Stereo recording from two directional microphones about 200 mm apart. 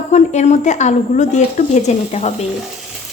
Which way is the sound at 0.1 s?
35° left (ahead or behind).